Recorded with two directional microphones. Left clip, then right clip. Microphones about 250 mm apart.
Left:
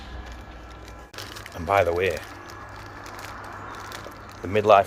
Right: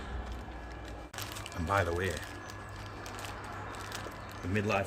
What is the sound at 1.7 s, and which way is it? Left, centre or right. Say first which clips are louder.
Speech: left 11 dB; centre.